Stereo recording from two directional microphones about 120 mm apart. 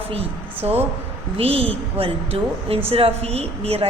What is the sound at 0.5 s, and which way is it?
Speech, 15° right (ahead or behind).